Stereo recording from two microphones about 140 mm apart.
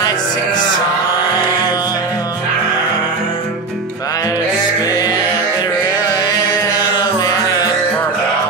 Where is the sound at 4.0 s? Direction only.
25° left (ahead or behind).